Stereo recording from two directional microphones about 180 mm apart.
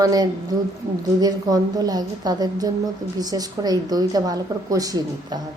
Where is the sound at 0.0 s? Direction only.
20° right (ahead or behind).